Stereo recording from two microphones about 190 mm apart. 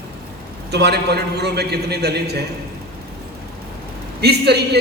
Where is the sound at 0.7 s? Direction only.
60° right (ahead or behind).